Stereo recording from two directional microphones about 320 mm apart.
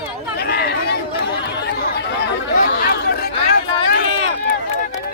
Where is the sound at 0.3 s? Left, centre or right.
Left.